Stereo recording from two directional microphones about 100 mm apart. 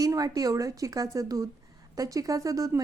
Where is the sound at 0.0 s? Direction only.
35° right (ahead or behind).